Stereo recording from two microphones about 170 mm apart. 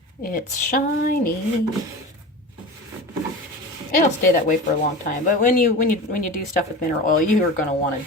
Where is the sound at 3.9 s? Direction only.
50° left (ahead or behind).